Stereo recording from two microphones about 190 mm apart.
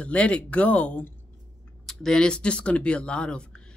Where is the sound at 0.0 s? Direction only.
5° left (ahead or behind).